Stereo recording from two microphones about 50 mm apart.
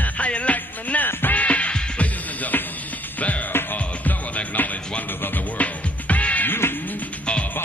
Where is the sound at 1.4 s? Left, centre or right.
Left.